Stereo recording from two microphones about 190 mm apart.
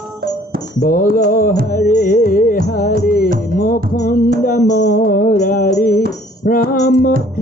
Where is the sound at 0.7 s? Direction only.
50° left (ahead or behind).